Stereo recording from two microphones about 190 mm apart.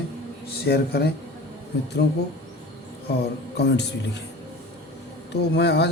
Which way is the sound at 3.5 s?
65° left (ahead or behind).